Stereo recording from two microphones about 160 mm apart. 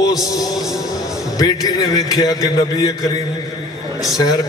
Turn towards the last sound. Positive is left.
turn(degrees=25)  # may be behind; listen again after turning